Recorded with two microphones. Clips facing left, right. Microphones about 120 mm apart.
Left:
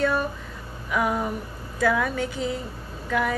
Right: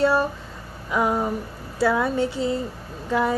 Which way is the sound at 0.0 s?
30° right (ahead or behind).